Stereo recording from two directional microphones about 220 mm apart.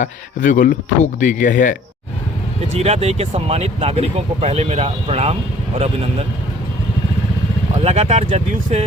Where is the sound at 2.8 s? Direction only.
30° right (ahead or behind).